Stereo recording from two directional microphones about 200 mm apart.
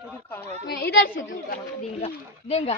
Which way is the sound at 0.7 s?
55° left (ahead or behind).